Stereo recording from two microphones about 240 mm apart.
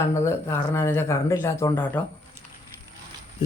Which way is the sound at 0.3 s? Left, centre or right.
Centre.